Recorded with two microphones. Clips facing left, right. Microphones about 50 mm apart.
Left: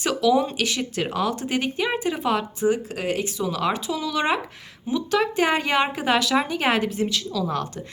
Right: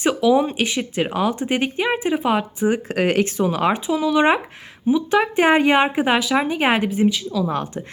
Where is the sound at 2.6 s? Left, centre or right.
Right.